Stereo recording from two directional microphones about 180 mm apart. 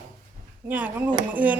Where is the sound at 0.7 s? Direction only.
10° right (ahead or behind).